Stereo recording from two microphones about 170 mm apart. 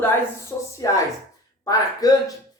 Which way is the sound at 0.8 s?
20° left (ahead or behind).